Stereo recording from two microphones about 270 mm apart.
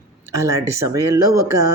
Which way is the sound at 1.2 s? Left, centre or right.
Right.